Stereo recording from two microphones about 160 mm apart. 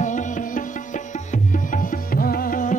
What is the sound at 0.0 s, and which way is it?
Music, 50° left (ahead or behind).